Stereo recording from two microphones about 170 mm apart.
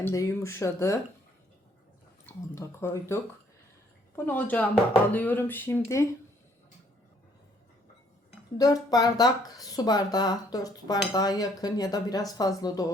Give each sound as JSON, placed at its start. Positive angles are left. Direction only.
{"t": 0.0, "sound": "speech", "side_deg": 15}
{"t": 2.6, "sound": "speech", "side_deg": 15}
{"t": 8.5, "sound": "speech", "side_deg": 20}